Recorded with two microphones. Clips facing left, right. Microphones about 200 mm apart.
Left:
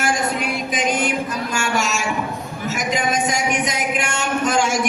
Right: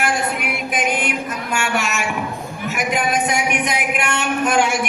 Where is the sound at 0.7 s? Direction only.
60° right (ahead or behind).